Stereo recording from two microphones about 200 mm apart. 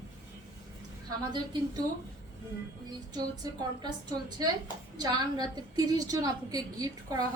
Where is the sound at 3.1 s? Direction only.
20° right (ahead or behind).